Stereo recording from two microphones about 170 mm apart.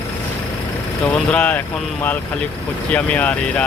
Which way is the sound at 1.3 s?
5° left (ahead or behind).